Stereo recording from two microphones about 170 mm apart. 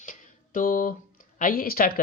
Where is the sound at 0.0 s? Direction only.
50° left (ahead or behind).